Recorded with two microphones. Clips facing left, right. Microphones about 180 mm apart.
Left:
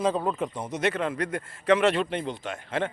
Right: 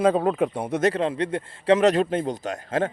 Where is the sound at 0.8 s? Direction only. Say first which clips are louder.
Right 4 dB; 30° right (ahead or behind).